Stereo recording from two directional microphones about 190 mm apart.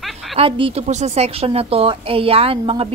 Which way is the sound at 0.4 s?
30° right (ahead or behind).